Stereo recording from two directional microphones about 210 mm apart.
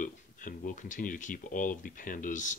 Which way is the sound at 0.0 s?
40° left (ahead or behind).